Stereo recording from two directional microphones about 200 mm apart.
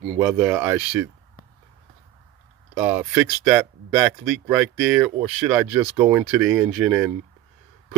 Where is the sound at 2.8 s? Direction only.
10° right (ahead or behind).